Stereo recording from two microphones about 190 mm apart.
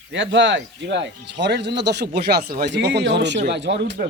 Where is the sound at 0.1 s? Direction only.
75° right (ahead or behind).